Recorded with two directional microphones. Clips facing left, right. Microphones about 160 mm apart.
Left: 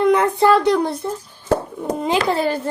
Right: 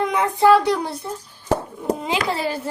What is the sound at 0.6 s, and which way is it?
Speech, 55° left (ahead or behind).